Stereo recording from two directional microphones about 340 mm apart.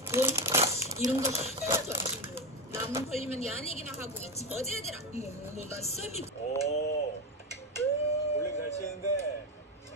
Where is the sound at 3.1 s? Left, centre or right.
Centre.